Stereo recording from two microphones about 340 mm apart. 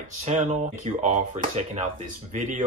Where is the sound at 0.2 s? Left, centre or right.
Centre.